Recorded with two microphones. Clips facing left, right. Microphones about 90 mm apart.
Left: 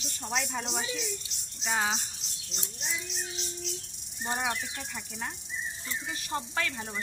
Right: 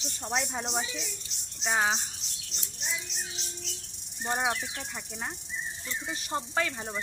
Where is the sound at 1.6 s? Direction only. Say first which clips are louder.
Right 2 dB; 30° right (ahead or behind).